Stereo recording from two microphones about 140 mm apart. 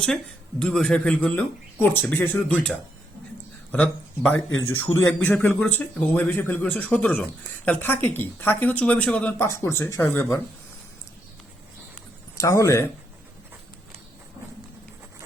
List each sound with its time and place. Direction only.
0.6 s speech: 5° left (ahead or behind)
3.7 s speech: 10° left (ahead or behind)
12.4 s speech: 25° left (ahead or behind)